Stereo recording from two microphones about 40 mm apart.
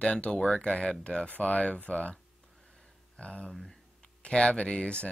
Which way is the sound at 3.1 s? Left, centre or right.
Left.